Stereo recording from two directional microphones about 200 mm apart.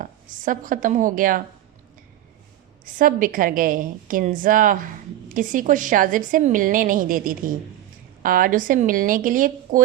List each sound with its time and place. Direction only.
0.0 s a woman's voice: 40° right (ahead or behind)
2.8 s a woman's voice: 45° right (ahead or behind)